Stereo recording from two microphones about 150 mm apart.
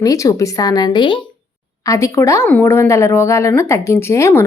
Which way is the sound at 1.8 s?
20° left (ahead or behind).